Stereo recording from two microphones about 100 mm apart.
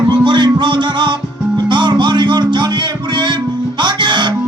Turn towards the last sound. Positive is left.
turn(degrees=-50)  # may be behind; listen again after turning